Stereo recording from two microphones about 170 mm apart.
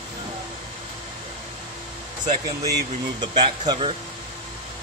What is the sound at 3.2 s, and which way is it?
Speech, 25° right (ahead or behind).